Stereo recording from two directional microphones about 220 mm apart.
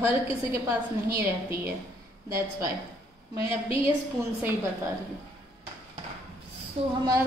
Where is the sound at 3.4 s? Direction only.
25° left (ahead or behind).